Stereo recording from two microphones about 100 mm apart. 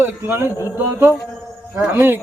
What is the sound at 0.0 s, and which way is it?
Speech, 25° right (ahead or behind).